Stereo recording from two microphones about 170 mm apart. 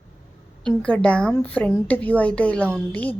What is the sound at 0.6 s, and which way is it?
A woman's voice, 5° left (ahead or behind).